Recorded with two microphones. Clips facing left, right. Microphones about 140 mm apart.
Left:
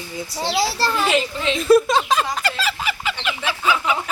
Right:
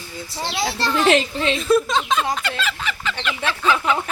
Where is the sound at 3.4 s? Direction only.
10° left (ahead or behind).